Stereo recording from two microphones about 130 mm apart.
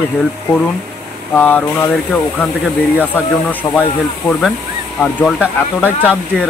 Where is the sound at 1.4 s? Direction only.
15° left (ahead or behind).